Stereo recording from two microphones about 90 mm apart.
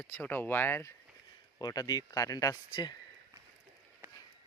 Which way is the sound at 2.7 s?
55° left (ahead or behind).